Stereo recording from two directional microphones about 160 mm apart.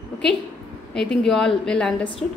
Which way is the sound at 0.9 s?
5° left (ahead or behind).